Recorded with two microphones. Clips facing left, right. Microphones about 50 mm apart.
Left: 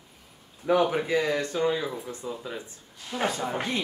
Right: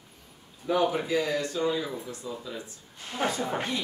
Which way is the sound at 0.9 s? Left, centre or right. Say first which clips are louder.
Left 2 dB; left.